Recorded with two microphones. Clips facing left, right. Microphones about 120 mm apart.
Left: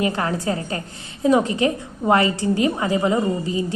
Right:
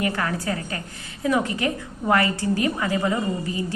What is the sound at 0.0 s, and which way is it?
A woman's voice, 25° left (ahead or behind).